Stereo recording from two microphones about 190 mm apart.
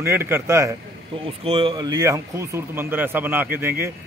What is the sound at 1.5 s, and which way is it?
Speech, 25° right (ahead or behind).